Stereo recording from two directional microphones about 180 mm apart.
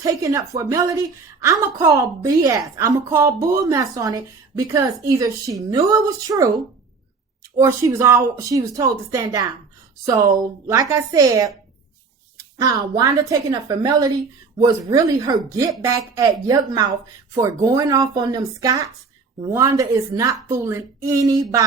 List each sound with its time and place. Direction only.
0.0 s a woman's voice: 20° right (ahead or behind)
7.5 s a woman's voice: 15° right (ahead or behind)
12.5 s a woman's voice: 20° right (ahead or behind)